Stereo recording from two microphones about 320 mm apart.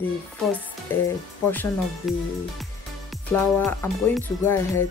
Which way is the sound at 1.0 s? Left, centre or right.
Centre.